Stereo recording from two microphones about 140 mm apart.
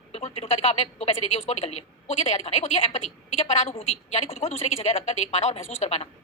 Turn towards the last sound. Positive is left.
turn(degrees=50)  # may be behind; listen again after turning